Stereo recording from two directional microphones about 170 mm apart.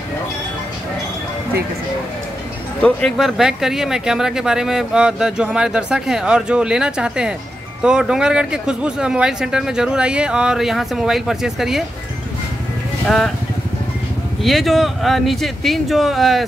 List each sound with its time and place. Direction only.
2.8 s speech: 5° left (ahead or behind)
13.0 s speech: centre (ahead or behind)
14.4 s speech: centre (ahead or behind)